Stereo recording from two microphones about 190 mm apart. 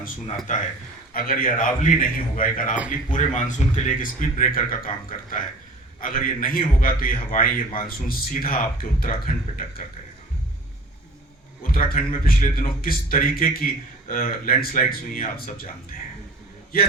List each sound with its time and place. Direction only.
1.1 s a man's voice: 50° left (ahead or behind)
11.6 s a man's voice: 50° left (ahead or behind)